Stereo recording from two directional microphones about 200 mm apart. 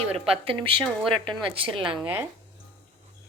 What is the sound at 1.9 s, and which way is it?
Speech, 10° right (ahead or behind).